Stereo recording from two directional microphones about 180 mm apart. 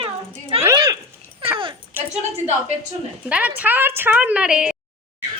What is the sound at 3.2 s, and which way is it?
A woman's voice, 5° right (ahead or behind).